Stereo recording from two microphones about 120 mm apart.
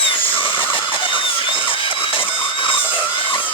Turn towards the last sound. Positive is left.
turn(degrees=45)  # may be behind; listen again after turning